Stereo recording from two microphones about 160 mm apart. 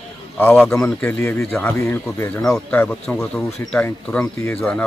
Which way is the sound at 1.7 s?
15° left (ahead or behind).